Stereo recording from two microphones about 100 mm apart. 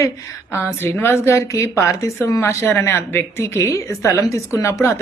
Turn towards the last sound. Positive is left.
turn(degrees=30)  # may be behind; listen again after turning